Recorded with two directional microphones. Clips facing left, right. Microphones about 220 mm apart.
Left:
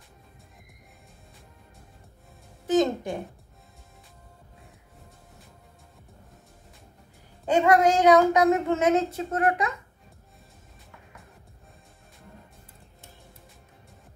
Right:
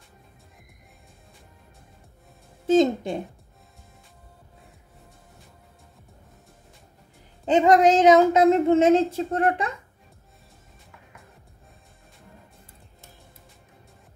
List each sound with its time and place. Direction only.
2.6 s speech: 25° right (ahead or behind)
7.4 s speech: 20° right (ahead or behind)